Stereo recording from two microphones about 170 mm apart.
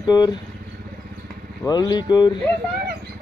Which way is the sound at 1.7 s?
25° left (ahead or behind).